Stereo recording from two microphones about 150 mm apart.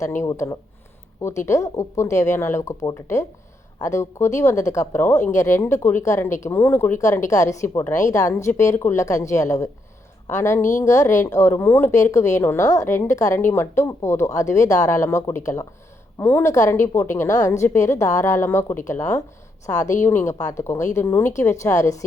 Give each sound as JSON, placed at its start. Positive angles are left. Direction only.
{"t": 0.0, "sound": "a woman's voice", "side_deg": 20}